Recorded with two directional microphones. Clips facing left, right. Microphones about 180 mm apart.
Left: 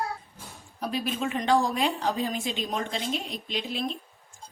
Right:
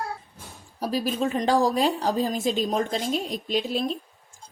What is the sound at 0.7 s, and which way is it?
A woman's voice, 35° right (ahead or behind).